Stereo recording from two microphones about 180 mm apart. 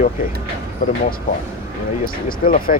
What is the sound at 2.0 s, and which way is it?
Speech, 55° left (ahead or behind).